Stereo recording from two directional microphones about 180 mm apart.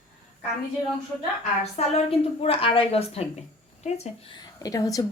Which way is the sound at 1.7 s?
35° left (ahead or behind).